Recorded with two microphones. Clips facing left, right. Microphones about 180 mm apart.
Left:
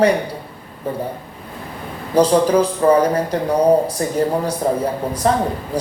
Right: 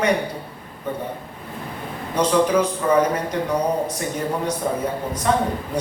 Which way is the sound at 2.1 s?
35° left (ahead or behind).